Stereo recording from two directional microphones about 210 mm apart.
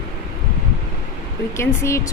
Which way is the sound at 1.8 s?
15° left (ahead or behind).